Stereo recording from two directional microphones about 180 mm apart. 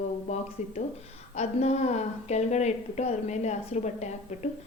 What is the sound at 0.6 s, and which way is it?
A woman's voice, 40° left (ahead or behind).